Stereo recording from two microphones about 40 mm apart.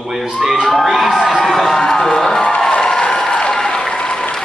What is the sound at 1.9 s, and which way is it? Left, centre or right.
Music, centre.